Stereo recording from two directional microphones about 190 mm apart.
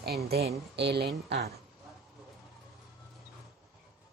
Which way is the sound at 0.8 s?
60° right (ahead or behind).